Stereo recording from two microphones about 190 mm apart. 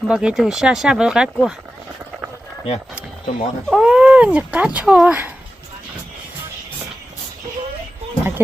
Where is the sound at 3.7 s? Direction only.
5° right (ahead or behind).